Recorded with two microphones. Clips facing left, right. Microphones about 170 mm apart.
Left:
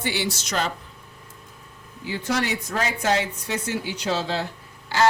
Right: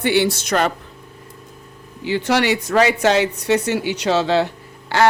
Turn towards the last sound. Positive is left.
turn(degrees=-65)  # may be behind; listen again after turning